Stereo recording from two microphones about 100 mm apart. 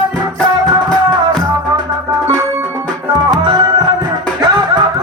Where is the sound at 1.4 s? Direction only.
40° right (ahead or behind).